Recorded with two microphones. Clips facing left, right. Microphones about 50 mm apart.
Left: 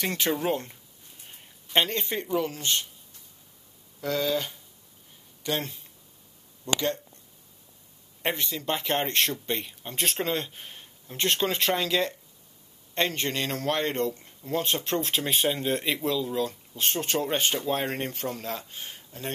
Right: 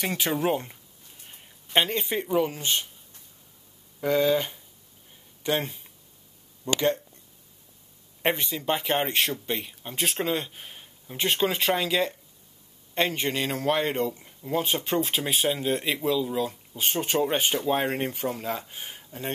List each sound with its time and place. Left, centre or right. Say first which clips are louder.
0.0 s a man's voice: right 1 dB; centre
4.0 s speech: right 5 dB; centre
8.2 s a man's voice: right 3 dB; centre